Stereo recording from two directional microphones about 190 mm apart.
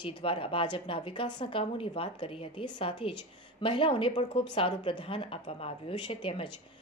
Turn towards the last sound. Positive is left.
turn(degrees=30)  # may be behind; listen again after turning